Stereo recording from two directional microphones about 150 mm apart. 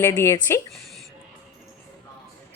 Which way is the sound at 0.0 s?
20° left (ahead or behind).